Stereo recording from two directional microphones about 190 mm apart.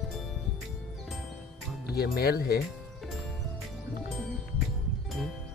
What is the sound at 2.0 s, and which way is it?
Speech, 55° left (ahead or behind).